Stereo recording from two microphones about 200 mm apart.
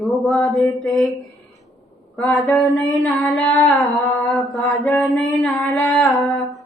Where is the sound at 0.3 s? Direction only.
Centre (ahead or behind).